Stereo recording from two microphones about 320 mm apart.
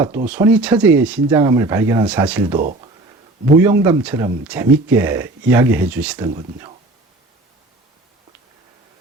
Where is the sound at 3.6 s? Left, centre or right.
Centre.